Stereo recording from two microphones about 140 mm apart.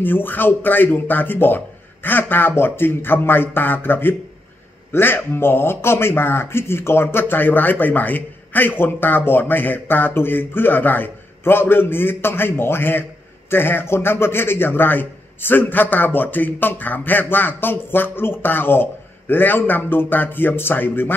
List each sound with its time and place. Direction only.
0.0 s speech: 15° left (ahead or behind)